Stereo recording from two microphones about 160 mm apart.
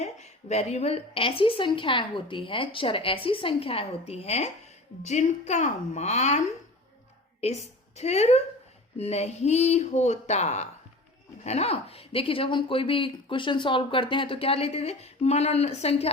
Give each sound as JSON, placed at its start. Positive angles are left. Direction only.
{"t": 0.0, "sound": "speech", "side_deg": 45}
{"t": 7.4, "sound": "a woman's voice", "side_deg": 45}